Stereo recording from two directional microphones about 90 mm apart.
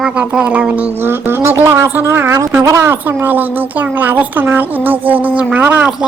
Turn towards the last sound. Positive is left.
turn(degrees=-20)  # may be behind; listen again after turning